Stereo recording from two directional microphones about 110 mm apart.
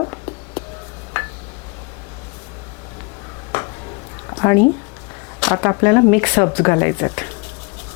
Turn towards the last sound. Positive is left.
turn(degrees=25)  # may be behind; listen again after turning